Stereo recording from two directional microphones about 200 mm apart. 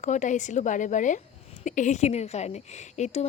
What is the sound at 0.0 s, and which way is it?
A woman's voice, 35° left (ahead or behind).